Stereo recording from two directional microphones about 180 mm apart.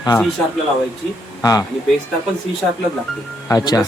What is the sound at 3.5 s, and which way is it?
Speech, 20° left (ahead or behind).